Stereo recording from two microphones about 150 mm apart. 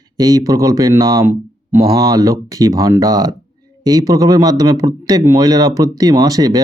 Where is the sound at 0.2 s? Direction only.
25° right (ahead or behind).